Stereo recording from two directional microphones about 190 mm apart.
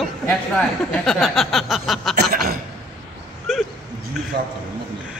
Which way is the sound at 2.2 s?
50° right (ahead or behind).